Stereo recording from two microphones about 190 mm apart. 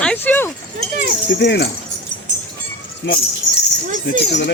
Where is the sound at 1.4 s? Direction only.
60° left (ahead or behind).